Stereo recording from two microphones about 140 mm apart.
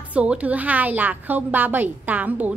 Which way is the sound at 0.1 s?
10° right (ahead or behind).